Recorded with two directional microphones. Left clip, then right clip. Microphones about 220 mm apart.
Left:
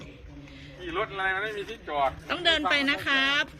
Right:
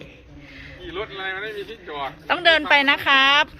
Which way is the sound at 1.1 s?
25° left (ahead or behind).